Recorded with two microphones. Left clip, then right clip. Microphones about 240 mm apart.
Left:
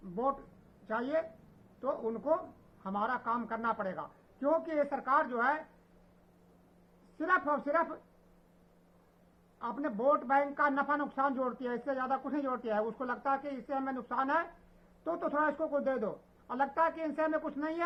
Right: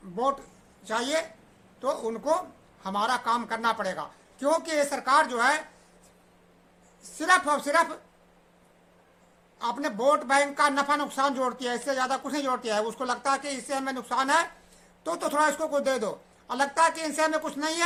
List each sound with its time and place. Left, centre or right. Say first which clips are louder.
0.9 s a man's voice: right 6 dB; right
7.2 s a man's voice: right 8 dB; centre
9.6 s a man's voice: right 7 dB; right